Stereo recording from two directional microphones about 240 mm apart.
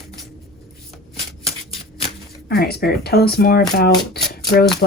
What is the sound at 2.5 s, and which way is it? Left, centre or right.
Speech, left.